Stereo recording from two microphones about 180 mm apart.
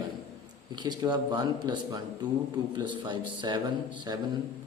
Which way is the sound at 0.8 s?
25° right (ahead or behind).